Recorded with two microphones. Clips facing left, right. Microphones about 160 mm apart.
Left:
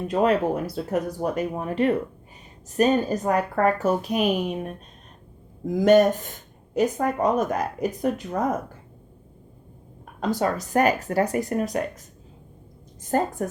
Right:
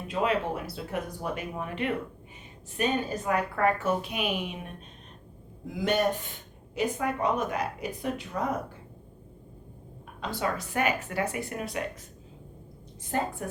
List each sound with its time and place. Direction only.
0.1 s a woman's voice: 45° left (ahead or behind)
10.2 s a woman's voice: 45° left (ahead or behind)
13.1 s speech: 40° left (ahead or behind)